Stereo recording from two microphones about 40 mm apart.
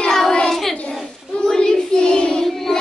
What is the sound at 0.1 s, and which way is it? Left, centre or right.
Child singing, centre.